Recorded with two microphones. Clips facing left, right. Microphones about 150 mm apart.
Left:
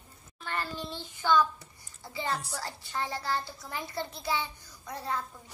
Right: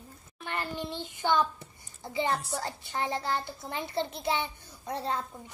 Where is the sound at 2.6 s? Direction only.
20° right (ahead or behind).